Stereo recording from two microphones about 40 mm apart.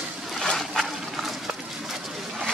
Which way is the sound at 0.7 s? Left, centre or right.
Centre.